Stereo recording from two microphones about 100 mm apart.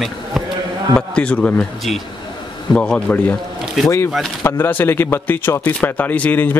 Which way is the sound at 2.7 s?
10° left (ahead or behind).